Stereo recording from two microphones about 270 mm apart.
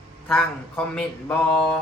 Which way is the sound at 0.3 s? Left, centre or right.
Centre.